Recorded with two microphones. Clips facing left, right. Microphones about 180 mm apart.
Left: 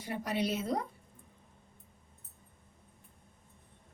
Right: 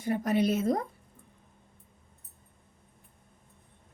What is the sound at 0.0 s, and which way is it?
Speech, 50° right (ahead or behind).